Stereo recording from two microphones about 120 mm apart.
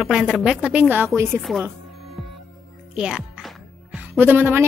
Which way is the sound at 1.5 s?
Centre (ahead or behind).